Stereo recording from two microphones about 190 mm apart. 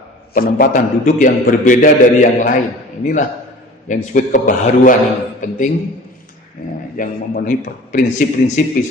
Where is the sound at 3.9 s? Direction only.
40° left (ahead or behind).